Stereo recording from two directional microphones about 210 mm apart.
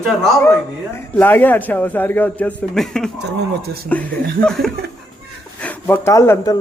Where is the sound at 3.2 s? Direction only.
50° right (ahead or behind).